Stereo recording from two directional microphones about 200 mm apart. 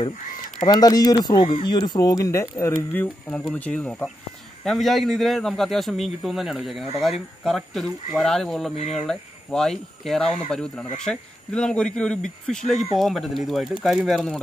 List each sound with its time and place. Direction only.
0.6 s a man's voice: 20° left (ahead or behind); by 14.4 s centre (ahead or behind)